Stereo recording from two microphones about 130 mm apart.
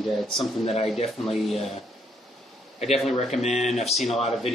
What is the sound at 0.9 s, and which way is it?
Speech, 50° left (ahead or behind).